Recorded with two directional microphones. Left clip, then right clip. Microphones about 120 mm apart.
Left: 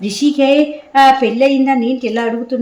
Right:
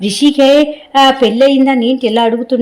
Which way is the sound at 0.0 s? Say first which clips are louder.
Right 4 dB; 20° right (ahead or behind).